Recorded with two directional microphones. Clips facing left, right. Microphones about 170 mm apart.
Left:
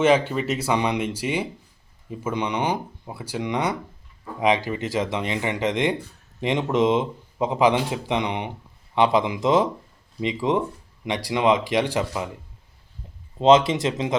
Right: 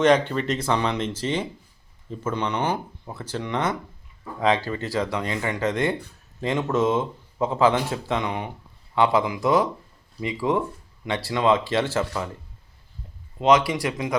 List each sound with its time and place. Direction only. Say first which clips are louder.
0.0 s speech: even; 5° left (ahead or behind)
13.4 s speech: left 3 dB; 25° left (ahead or behind)